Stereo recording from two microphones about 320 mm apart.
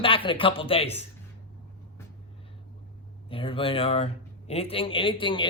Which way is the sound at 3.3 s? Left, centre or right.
Centre.